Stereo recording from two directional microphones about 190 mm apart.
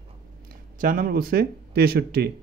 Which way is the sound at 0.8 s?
45° right (ahead or behind).